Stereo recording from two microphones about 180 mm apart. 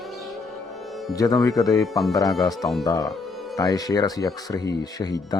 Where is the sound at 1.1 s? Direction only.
20° left (ahead or behind).